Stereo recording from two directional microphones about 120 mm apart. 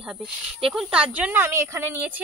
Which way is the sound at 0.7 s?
5° right (ahead or behind).